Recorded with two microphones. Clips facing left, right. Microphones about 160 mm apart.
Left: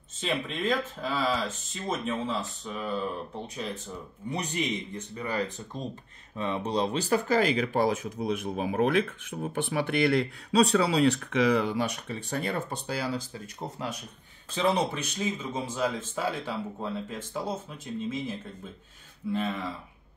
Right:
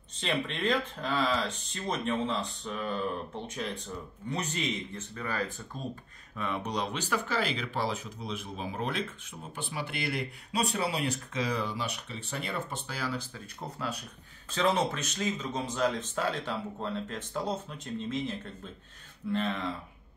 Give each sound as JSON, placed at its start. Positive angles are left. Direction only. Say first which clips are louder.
{"t": 0.2, "sound": "speech", "louder": "left 1 dB", "side_deg": 0}
{"t": 4.3, "sound": "speech", "louder": "left 2 dB", "side_deg": 15}
{"t": 6.3, "sound": "speech", "louder": "left 4 dB", "side_deg": 30}
{"t": 12.8, "sound": "speech", "louder": "left 4 dB", "side_deg": 35}
{"t": 14.5, "sound": "speech", "louder": "left 1 dB", "side_deg": 15}
{"t": 19.3, "sound": "speech", "louder": "even", "side_deg": 5}